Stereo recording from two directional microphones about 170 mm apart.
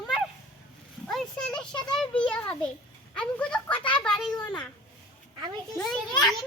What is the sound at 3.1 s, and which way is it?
Speech, 5° left (ahead or behind).